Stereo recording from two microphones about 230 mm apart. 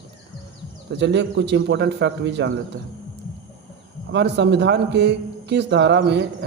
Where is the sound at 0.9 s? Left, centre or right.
Right.